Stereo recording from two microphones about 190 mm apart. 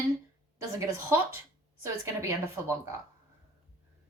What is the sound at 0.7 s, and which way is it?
A woman's voice, 15° right (ahead or behind).